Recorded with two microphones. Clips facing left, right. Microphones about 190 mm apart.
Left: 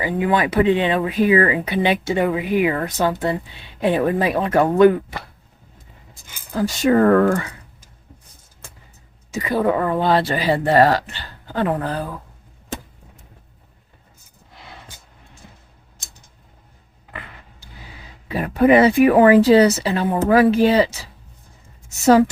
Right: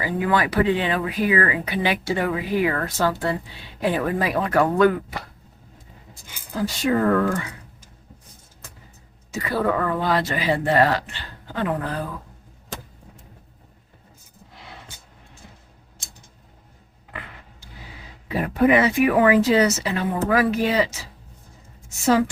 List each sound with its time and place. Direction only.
0.0 s speech: 20° left (ahead or behind)
6.7 s speech: 50° left (ahead or behind)
9.3 s speech: 20° left (ahead or behind); by 12.0 s 35° left (ahead or behind)
18.6 s a woman's voice: 35° left (ahead or behind)